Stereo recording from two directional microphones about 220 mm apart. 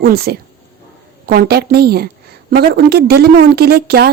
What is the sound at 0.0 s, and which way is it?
Speech, 45° right (ahead or behind).